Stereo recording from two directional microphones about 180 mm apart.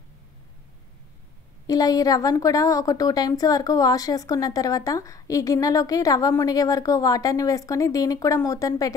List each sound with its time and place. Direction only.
1.7 s a woman's voice: 20° left (ahead or behind)